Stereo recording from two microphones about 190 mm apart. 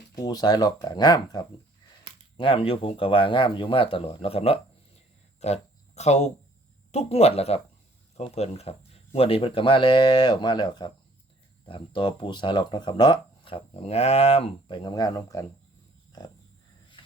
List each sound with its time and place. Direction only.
0.2 s speech: 20° left (ahead or behind)
5.4 s a sound: 35° left (ahead or behind)
6.9 s speech: 35° left (ahead or behind)
16.1 s pig: 20° left (ahead or behind)